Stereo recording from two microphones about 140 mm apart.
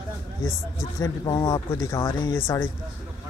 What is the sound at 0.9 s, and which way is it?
Speech, 25° left (ahead or behind).